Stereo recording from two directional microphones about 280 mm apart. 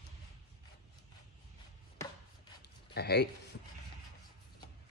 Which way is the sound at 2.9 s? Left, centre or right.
Left.